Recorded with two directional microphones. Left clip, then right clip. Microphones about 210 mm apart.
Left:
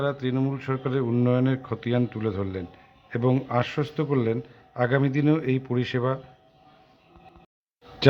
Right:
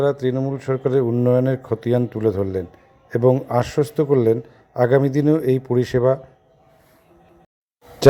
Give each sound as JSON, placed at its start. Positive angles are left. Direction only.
{"t": 0.0, "sound": "a man's voice", "side_deg": -25}